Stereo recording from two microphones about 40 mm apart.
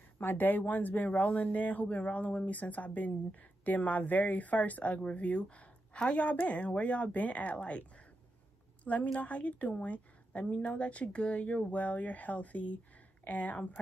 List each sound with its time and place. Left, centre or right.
0.2 s a woman's voice: left
8.8 s a woman's voice: left